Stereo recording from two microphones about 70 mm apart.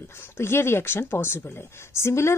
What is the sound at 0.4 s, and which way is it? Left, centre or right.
Speech, left.